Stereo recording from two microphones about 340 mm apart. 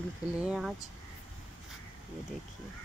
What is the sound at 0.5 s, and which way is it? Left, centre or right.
Speech, centre.